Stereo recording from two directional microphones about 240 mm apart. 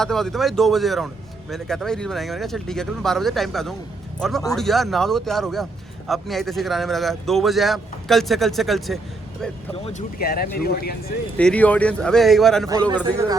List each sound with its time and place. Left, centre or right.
0.0 s speech: centre
10.2 s speech: left
11.3 s speech: centre